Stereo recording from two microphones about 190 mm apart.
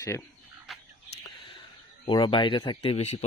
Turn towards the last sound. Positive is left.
turn(degrees=30)  # may be behind; listen again after turning